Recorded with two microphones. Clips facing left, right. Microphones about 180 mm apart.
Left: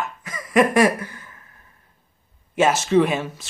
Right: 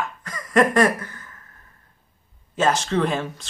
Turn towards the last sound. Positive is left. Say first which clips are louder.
# left 4 dB
turn(degrees=5)  # may be behind; listen again after turning